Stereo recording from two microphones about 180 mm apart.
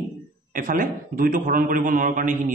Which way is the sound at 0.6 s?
50° right (ahead or behind).